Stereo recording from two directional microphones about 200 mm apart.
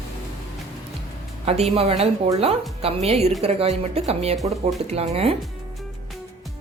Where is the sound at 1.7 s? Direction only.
30° right (ahead or behind).